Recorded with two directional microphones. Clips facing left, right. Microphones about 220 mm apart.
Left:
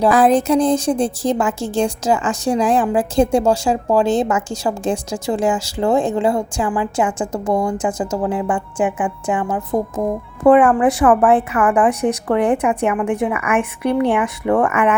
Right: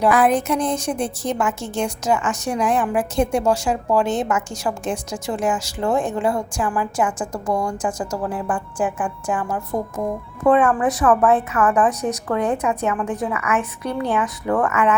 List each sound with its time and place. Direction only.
0.0 s a woman's voice: 30° left (ahead or behind)
10.4 s a woman's voice: 30° left (ahead or behind)